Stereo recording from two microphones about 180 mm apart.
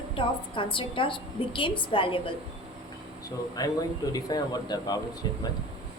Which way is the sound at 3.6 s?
20° left (ahead or behind).